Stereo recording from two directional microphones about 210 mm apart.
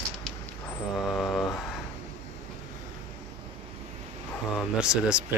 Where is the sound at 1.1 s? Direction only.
Centre (ahead or behind).